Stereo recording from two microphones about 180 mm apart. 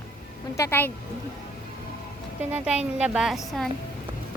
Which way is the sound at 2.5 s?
5° right (ahead or behind).